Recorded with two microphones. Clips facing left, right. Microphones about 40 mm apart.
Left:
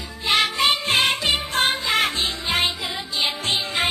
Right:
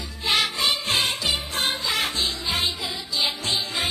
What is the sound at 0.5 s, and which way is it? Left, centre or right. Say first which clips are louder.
Music: left 4 dB; left.